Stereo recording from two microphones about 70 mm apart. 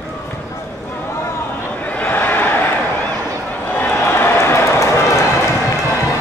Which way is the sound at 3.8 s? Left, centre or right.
Left.